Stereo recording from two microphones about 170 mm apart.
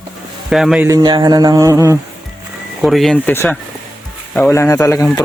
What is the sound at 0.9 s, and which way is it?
Speech, 25° right (ahead or behind).